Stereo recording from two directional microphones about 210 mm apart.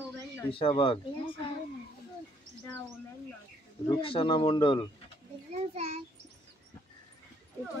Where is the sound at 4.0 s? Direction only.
25° left (ahead or behind).